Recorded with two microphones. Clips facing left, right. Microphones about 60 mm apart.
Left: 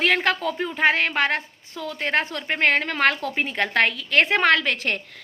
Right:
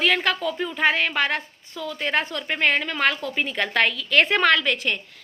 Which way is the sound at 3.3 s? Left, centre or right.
Left.